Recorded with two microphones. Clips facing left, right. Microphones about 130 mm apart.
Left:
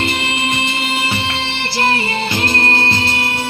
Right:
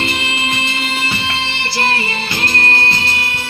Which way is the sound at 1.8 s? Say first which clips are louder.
Left 2 dB; 20° left (ahead or behind).